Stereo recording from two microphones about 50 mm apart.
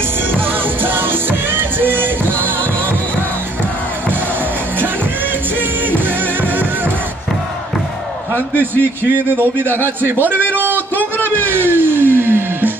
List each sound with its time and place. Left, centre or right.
1.5 s music: right
9.4 s a man's voice: right
10.5 s a sound: right
11.4 s music: right